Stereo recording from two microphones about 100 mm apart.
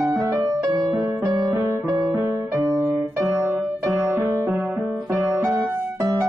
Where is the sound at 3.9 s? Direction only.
5° right (ahead or behind).